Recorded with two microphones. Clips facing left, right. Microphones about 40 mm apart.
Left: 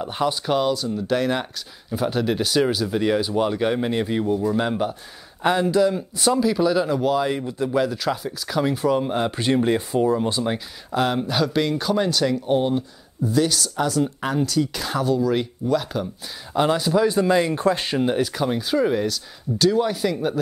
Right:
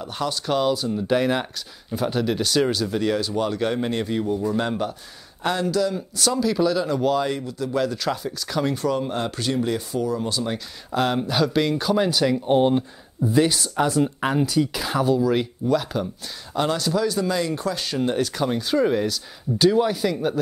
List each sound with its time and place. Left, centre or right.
0.0 s speech: centre
0.7 s speech: centre
7.3 s speech: left
7.7 s speech: centre
9.4 s speech: left
10.9 s speech: centre
12.4 s speech: right; by 16.1 s centre
16.5 s speech: centre; by 17.9 s left
17.9 s speech: centre